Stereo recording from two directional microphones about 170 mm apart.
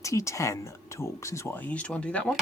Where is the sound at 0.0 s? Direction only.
20° left (ahead or behind).